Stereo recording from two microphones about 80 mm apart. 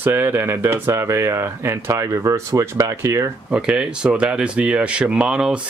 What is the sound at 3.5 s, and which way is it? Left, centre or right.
Speech, centre.